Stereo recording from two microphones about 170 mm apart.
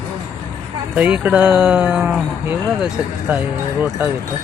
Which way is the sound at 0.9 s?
10° right (ahead or behind).